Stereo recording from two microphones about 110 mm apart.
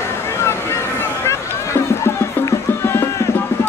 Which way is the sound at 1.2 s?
25° left (ahead or behind).